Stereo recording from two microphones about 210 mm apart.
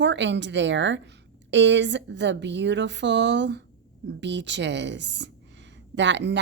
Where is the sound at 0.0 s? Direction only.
55° right (ahead or behind).